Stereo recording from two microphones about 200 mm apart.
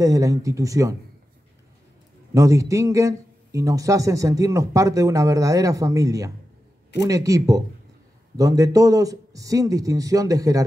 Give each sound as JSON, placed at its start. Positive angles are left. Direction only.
{"t": 0.0, "sound": "a man's voice", "side_deg": -15}
{"t": 2.3, "sound": "a man's voice", "side_deg": -15}